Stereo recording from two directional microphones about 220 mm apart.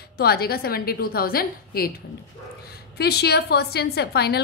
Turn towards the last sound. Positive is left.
turn(degrees=45)  # may be behind; listen again after turning